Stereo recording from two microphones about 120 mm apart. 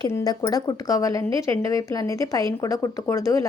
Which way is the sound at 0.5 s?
30° left (ahead or behind).